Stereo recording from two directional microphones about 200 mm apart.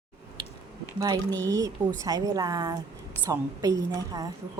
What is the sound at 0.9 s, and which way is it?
A woman's voice, 20° right (ahead or behind).